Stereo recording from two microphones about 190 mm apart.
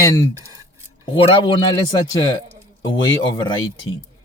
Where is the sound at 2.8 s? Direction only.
25° left (ahead or behind).